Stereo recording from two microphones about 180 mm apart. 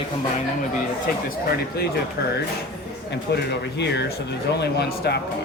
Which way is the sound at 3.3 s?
65° left (ahead or behind).